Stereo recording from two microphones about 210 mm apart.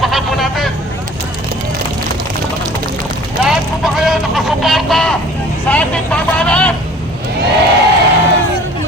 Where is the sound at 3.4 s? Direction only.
Centre (ahead or behind).